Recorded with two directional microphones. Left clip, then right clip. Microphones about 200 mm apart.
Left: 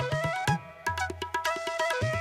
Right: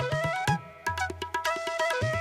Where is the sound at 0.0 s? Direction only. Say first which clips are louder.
Right 1 dB; centre (ahead or behind).